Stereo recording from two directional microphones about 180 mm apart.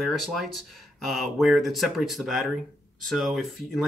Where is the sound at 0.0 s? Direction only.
Centre (ahead or behind).